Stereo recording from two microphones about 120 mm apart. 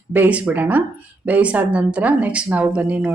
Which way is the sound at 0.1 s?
15° right (ahead or behind).